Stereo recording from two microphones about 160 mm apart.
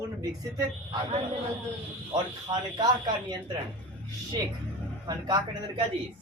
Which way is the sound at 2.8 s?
25° right (ahead or behind).